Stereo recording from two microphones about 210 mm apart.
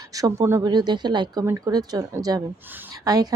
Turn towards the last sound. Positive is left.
turn(degrees=-15)  # may be behind; listen again after turning